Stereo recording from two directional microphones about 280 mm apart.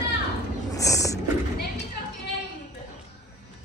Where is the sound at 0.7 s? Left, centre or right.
Centre.